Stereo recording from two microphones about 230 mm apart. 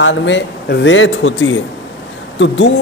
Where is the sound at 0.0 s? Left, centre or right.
Left.